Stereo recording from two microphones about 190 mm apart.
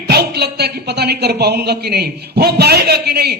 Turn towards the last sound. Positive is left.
turn(degrees=-55)  # may be behind; listen again after turning